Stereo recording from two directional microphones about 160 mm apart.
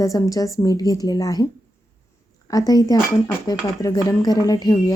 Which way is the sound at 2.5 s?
20° left (ahead or behind).